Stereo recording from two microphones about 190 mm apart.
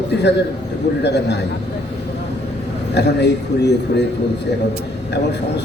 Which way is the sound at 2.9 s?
65° left (ahead or behind).